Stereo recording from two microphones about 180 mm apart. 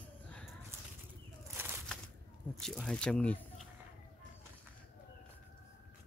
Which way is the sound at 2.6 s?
5° left (ahead or behind).